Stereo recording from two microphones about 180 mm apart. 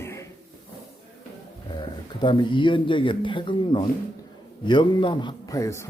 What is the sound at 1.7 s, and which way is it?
Speech, 25° left (ahead or behind).